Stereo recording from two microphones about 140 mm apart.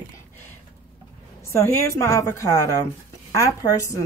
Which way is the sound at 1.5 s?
20° left (ahead or behind).